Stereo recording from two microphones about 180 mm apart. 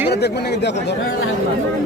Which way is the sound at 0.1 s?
65° left (ahead or behind).